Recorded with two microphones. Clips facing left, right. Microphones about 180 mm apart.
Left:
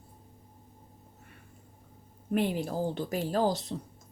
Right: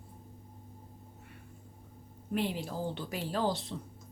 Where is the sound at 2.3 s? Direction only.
50° left (ahead or behind).